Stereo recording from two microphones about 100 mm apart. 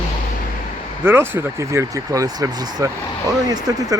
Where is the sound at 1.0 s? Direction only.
20° right (ahead or behind).